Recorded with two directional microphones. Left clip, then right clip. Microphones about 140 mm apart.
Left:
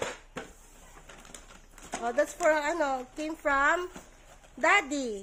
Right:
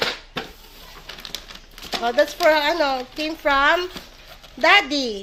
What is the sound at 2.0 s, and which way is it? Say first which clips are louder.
Speech: right 9 dB; 20° right (ahead or behind).